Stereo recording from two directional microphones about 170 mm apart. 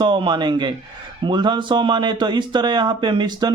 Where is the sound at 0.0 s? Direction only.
30° right (ahead or behind).